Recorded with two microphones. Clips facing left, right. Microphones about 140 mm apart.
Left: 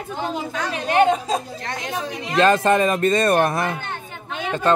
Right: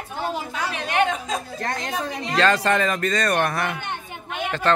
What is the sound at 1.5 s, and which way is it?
Speech, 50° right (ahead or behind).